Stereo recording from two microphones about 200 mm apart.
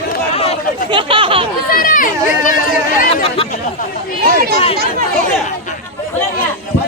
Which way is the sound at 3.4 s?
30° left (ahead or behind).